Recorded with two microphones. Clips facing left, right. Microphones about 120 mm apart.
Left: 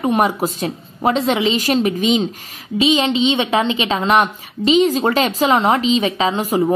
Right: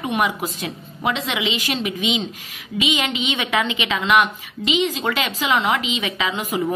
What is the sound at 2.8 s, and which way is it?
A woman's voice, 30° left (ahead or behind).